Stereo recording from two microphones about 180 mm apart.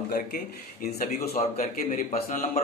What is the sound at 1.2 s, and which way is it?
A man's voice, 40° left (ahead or behind).